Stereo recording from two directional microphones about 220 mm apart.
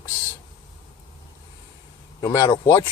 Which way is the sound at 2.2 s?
20° left (ahead or behind).